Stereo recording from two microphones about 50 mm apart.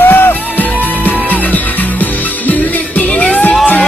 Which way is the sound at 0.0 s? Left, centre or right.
Left.